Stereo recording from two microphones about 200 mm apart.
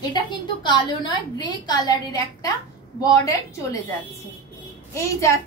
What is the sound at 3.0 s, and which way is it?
Speech, 15° left (ahead or behind).